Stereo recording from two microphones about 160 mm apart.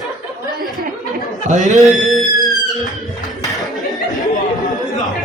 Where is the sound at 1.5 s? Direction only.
50° right (ahead or behind).